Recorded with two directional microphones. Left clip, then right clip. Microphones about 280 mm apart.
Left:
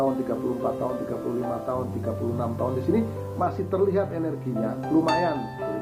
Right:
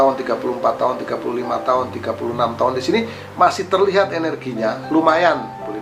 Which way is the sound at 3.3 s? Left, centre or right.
Centre.